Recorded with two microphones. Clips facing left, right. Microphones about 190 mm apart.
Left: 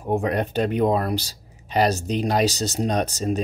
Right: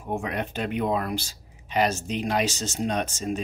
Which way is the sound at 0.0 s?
35° left (ahead or behind).